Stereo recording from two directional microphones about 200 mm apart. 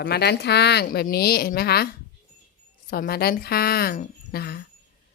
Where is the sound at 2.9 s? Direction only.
45° left (ahead or behind).